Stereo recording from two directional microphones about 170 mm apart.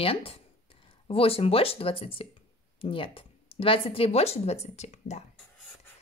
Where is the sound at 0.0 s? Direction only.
35° left (ahead or behind).